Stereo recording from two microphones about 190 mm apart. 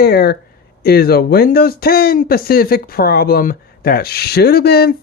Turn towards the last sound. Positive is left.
turn(degrees=55)  # may be behind; listen again after turning